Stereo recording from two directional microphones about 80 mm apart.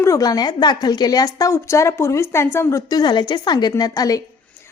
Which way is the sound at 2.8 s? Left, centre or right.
Left.